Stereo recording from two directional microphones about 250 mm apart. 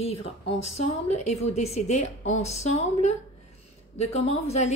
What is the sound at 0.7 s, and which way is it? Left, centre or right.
A woman's voice, left.